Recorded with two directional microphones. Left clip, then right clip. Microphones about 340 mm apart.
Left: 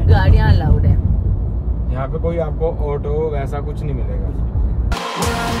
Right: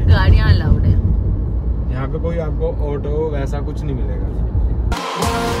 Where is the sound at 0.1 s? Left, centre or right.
Left.